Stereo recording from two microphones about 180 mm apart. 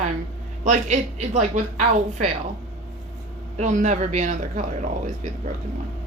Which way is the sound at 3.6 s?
40° right (ahead or behind).